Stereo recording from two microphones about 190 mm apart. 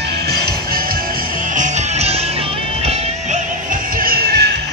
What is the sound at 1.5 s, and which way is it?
Music, 40° right (ahead or behind).